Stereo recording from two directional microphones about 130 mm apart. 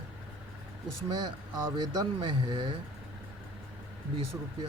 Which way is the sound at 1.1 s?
35° right (ahead or behind).